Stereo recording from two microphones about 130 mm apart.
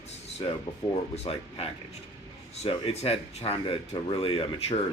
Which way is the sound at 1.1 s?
50° left (ahead or behind).